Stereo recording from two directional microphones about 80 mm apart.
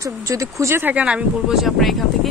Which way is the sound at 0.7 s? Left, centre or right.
Right.